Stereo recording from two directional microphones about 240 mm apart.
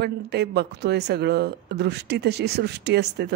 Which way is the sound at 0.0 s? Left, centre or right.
Right.